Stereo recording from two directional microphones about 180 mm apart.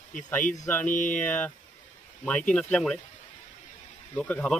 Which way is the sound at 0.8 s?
45° left (ahead or behind).